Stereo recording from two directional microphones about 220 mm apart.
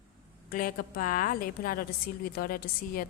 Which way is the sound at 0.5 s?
40° left (ahead or behind).